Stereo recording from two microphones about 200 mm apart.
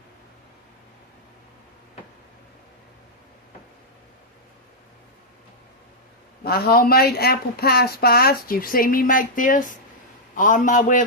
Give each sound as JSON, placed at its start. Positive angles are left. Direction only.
{"t": 6.4, "sound": "a man's voice", "side_deg": 50}